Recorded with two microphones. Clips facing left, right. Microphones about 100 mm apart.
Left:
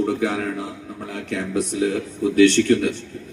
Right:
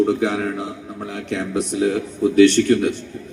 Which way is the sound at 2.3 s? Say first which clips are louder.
Right 2 dB; 30° right (ahead or behind).